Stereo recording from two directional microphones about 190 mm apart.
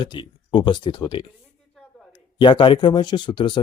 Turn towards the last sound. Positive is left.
turn(degrees=25)  # may be behind; listen again after turning